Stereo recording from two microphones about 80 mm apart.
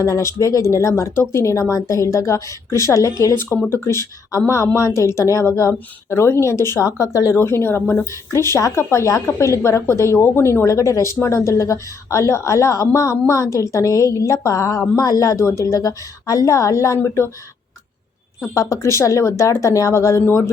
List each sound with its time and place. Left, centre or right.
0.0 s a woman's voice: left
14.9 s a woman's voice: left
18.5 s a woman's voice: left